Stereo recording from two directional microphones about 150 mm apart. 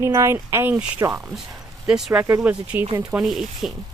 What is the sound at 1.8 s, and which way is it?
Speech, 5° right (ahead or behind).